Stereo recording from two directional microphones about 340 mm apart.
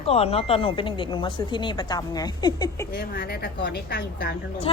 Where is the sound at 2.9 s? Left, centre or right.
Left.